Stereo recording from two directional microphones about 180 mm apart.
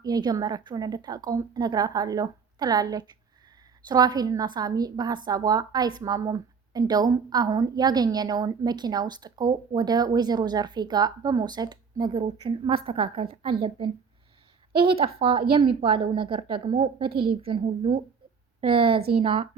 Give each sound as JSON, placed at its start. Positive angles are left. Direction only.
{"t": 0.0, "sound": "a woman's voice", "side_deg": -20}